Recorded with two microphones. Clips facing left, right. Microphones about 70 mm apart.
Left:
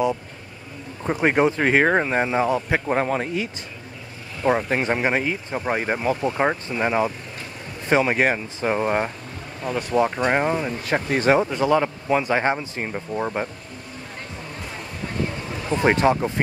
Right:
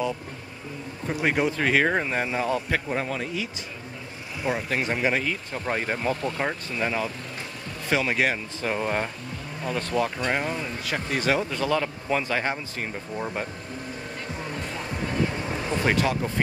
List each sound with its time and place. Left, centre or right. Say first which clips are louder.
1.0 s speech: left 5 dB; left
2.9 s speech: left 6 dB; left
4.5 s speech: left 6 dB; left
15.7 s speech: left 6 dB; left